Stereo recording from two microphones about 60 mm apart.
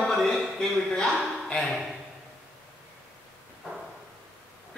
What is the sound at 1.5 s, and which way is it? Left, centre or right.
Speech, centre.